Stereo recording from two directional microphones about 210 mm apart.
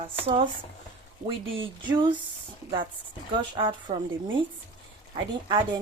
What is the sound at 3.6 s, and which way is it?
Speech, 25° right (ahead or behind).